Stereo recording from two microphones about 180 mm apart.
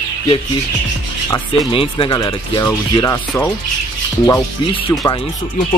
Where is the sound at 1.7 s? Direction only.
30° left (ahead or behind).